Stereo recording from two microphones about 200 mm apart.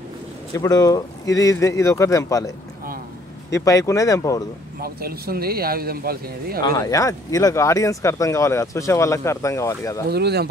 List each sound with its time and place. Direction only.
0.6 s speech: 15° left (ahead or behind)
3.5 s speech: 15° left (ahead or behind)
4.7 s speech: 50° right (ahead or behind)
6.6 s speech: 20° left (ahead or behind)
10.0 s speech: 55° right (ahead or behind)